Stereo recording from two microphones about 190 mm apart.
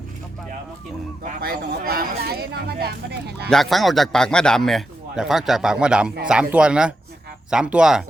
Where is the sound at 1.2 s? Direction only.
55° right (ahead or behind).